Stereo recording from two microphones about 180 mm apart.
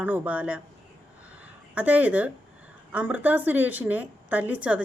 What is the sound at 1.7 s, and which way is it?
A woman's voice, 10° right (ahead or behind).